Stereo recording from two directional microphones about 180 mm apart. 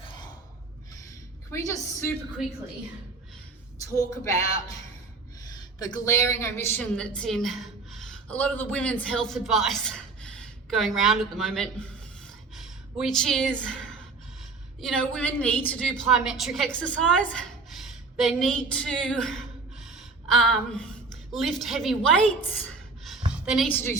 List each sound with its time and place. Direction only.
1.5 s speech: 15° left (ahead or behind)
3.8 s a woman's voice: 20° left (ahead or behind)
5.9 s speech: 20° left (ahead or behind)
6.9 s a woman's voice: 5° left (ahead or behind)
14.8 s a woman's voice: 5° left (ahead or behind)
23.0 s a sound: centre (ahead or behind)
23.7 s speech: 15° left (ahead or behind)